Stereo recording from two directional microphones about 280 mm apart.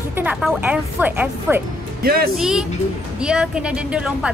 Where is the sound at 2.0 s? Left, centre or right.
Right.